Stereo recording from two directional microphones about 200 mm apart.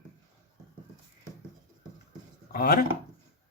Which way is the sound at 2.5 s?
50° left (ahead or behind).